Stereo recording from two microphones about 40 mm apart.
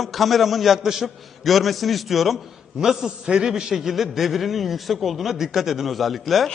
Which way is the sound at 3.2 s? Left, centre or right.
Centre.